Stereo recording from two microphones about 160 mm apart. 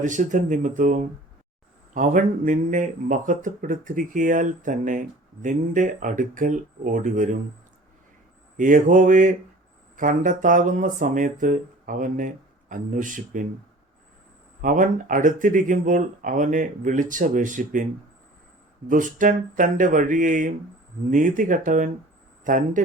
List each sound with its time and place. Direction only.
0.0 s speech: 50° right (ahead or behind)
8.5 s speech: 55° right (ahead or behind)
14.6 s speech: 55° right (ahead or behind)
18.9 s speech: 55° right (ahead or behind)